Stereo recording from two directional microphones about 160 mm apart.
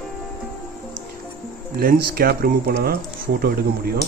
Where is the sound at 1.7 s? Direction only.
70° right (ahead or behind).